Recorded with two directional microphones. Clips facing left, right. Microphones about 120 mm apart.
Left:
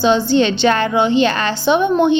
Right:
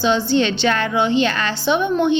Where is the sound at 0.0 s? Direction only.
25° left (ahead or behind).